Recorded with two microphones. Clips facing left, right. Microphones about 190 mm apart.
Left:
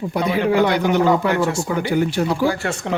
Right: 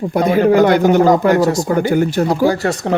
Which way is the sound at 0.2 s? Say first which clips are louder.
Right 6 dB; 45° right (ahead or behind).